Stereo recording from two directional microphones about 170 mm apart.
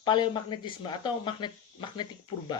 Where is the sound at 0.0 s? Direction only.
25° left (ahead or behind).